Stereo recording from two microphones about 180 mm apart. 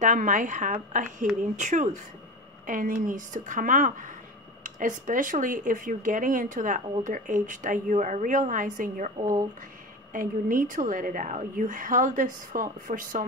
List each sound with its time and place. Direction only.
0.0 s speech: 45° right (ahead or behind)
9.2 s speech: 20° right (ahead or behind)
10.1 s speech: 50° right (ahead or behind)